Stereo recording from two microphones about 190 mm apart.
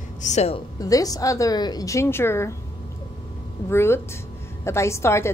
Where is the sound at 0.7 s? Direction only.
20° left (ahead or behind).